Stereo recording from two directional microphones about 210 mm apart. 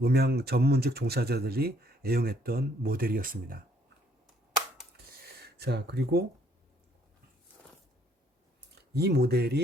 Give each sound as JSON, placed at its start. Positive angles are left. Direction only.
{"t": 0.0, "sound": "speech", "side_deg": -50}
{"t": 5.2, "sound": "a sound", "side_deg": -50}
{"t": 8.9, "sound": "speech", "side_deg": -50}